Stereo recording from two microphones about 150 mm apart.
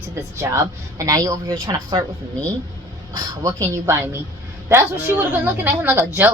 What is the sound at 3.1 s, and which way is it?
A woman's voice, 20° right (ahead or behind).